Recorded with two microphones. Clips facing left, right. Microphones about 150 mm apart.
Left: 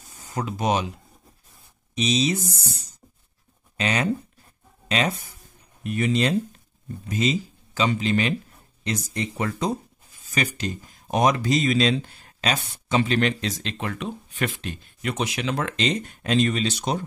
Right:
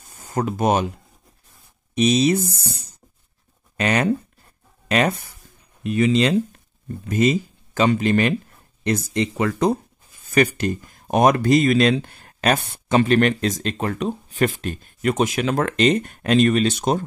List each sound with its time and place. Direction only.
0.1 s speech: 50° right (ahead or behind)
2.0 s speech: 55° right (ahead or behind)
6.1 s speech: 90° right
7.1 s speech: 55° right (ahead or behind); by 9.8 s 75° right (ahead or behind)
10.2 s speech: 55° right (ahead or behind)